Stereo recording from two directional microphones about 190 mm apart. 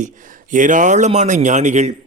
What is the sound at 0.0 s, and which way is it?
Speech, 40° right (ahead or behind).